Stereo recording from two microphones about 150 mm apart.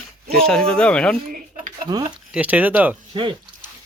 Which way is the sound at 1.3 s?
60° right (ahead or behind).